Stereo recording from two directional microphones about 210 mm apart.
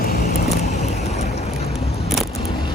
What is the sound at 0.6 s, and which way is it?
Vehicle, 30° left (ahead or behind).